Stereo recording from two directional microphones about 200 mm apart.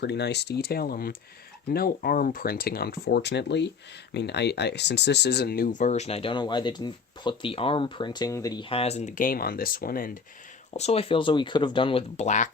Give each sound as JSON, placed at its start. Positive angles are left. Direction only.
{"t": 0.0, "sound": "speech", "side_deg": 55}
{"t": 10.8, "sound": "speech", "side_deg": 30}